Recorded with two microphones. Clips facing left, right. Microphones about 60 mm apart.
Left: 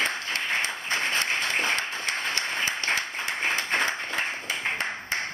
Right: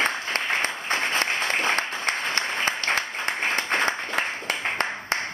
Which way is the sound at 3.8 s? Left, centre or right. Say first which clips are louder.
Right 3 dB; right.